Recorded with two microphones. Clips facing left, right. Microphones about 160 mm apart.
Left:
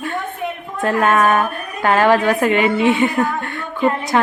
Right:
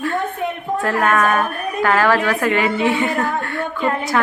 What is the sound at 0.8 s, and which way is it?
A woman's voice, 25° left (ahead or behind).